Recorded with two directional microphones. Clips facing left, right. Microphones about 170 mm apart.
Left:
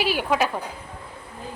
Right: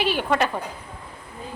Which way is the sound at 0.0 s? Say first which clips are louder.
Even; 5° left (ahead or behind).